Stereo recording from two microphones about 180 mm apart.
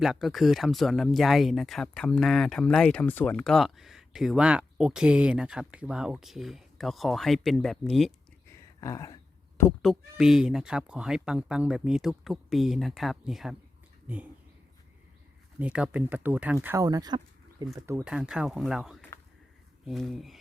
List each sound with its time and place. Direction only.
0.0 s speech: centre (ahead or behind)
8.4 s a sound: 20° left (ahead or behind)
9.8 s speech: centre (ahead or behind)
15.5 s speech: 5° right (ahead or behind)
18.0 s speech: 5° right (ahead or behind)